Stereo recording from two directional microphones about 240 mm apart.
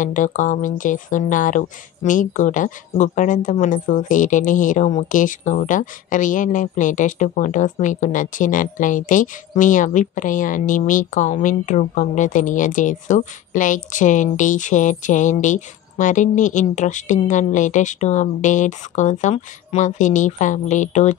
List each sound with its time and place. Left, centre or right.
0.0 s speech: left